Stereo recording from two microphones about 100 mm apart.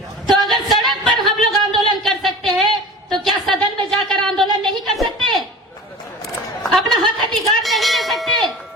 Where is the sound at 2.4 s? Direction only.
50° right (ahead or behind).